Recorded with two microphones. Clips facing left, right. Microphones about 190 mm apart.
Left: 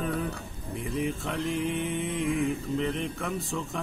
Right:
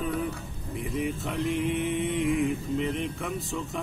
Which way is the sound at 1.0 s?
Centre (ahead or behind).